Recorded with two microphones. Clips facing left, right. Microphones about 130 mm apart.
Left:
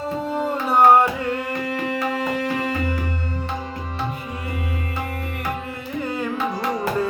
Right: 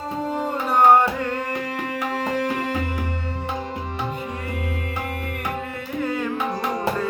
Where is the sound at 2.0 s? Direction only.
Centre (ahead or behind).